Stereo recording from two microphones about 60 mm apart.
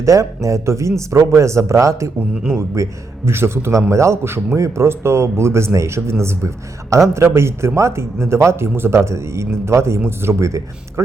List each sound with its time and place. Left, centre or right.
0.0 s speech: right